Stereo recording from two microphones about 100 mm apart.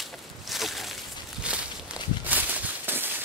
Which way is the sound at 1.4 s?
10° right (ahead or behind).